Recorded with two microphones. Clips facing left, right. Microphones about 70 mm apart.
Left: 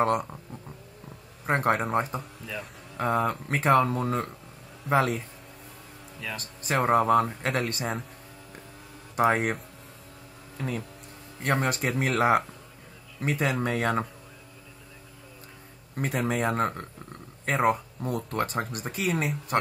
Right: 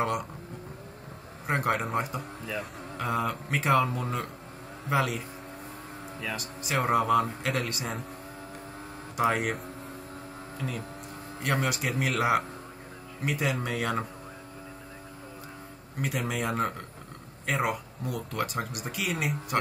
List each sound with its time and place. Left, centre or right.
1.5 s speech: left
6.4 s a man's voice: left
9.1 s speech: left
11.4 s speech: left
16.0 s speech: left